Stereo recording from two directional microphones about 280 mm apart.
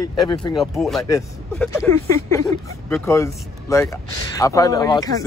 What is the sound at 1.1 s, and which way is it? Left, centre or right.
Speech, centre.